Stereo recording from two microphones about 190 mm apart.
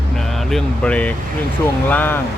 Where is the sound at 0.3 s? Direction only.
5° left (ahead or behind).